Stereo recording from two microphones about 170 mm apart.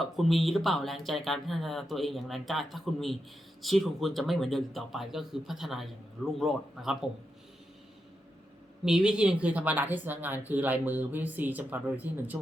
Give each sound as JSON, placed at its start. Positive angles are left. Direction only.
{"t": 0.0, "sound": "speech", "side_deg": 0}
{"t": 8.8, "sound": "speech", "side_deg": -5}